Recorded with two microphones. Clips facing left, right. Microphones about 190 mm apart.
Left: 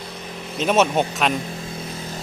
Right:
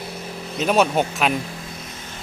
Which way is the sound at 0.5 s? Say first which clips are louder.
Even; centre (ahead or behind).